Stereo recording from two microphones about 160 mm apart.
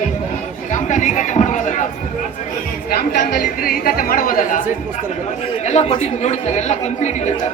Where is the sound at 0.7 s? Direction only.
50° left (ahead or behind).